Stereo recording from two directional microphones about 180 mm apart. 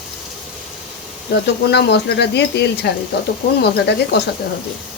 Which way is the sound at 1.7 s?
65° left (ahead or behind).